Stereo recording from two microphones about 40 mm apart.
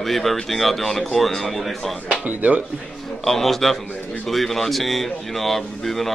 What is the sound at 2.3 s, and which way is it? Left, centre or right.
Speech, right.